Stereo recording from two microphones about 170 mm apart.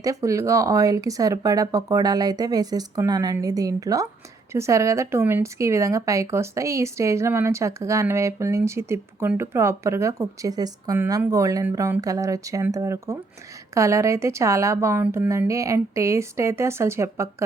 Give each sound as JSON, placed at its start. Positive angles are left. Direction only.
{"t": 0.0, "sound": "speech", "side_deg": -20}